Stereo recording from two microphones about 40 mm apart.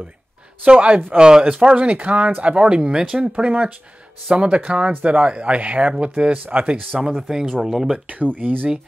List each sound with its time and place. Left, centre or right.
0.7 s speech: right
1.1 s speech: right
3.3 s speech: right
7.1 s speech: centre
8.1 s speech: right